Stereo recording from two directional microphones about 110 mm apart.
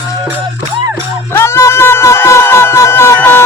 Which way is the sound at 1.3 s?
25° left (ahead or behind).